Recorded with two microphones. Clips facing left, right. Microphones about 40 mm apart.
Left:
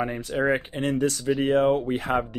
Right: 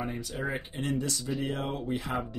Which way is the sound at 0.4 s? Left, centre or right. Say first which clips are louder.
Left 11 dB; left.